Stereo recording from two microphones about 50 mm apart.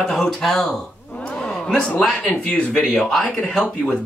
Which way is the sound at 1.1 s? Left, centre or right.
Centre.